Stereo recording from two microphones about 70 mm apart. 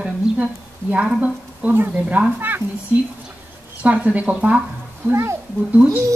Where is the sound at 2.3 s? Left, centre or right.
Right.